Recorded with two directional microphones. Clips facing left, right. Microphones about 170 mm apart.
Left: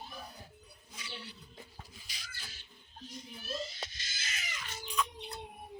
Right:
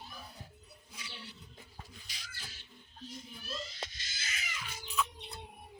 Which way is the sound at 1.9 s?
5° left (ahead or behind).